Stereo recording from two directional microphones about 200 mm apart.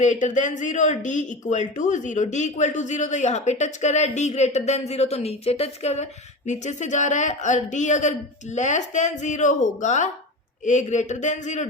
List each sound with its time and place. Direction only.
0.0 s speech: 40° left (ahead or behind)